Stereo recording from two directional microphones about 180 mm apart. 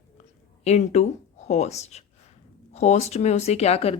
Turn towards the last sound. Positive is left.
turn(degrees=35)  # may be behind; listen again after turning